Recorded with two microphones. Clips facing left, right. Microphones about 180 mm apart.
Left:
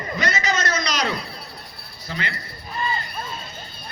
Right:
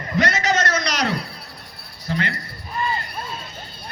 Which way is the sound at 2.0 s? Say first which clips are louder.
Right 5 dB; 55° right (ahead or behind).